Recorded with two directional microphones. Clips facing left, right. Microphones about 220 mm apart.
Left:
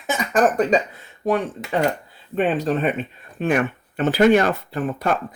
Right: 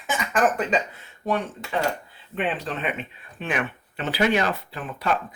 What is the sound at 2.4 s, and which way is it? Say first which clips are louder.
Speech: left 8 dB; 40° left (ahead or behind).